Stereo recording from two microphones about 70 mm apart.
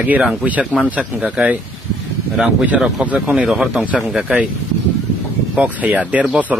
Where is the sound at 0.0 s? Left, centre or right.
Right.